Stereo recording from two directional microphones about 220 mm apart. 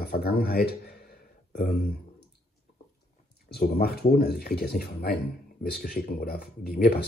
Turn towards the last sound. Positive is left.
turn(degrees=45)  # may be behind; listen again after turning